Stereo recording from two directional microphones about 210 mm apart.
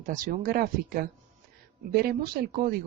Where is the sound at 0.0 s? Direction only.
40° right (ahead or behind).